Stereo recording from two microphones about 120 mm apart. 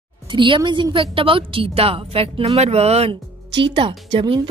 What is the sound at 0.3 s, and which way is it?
Speech, 40° right (ahead or behind).